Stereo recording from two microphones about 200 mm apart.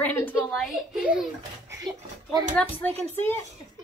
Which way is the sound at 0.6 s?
Centre (ahead or behind).